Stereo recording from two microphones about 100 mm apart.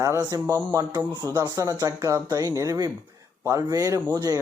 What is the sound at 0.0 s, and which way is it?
Speech, 35° right (ahead or behind).